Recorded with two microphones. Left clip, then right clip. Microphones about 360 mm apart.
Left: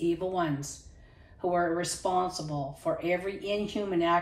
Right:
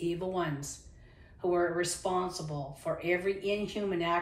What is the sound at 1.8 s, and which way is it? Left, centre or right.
Speech, centre.